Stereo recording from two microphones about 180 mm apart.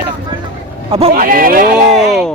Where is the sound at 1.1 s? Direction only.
55° right (ahead or behind).